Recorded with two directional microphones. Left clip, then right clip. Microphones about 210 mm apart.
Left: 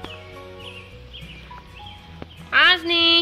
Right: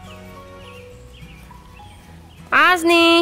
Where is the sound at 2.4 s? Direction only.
50° right (ahead or behind).